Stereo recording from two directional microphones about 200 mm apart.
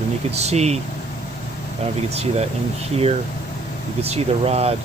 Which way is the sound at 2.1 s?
30° right (ahead or behind).